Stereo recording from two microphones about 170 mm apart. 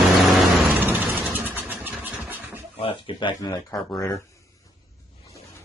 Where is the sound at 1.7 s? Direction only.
15° right (ahead or behind).